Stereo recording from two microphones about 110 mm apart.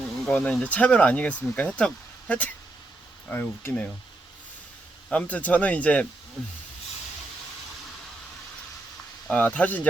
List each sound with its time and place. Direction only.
0.3 s speech: 10° left (ahead or behind)
5.1 s speech: 15° left (ahead or behind)
9.3 s speech: 15° left (ahead or behind)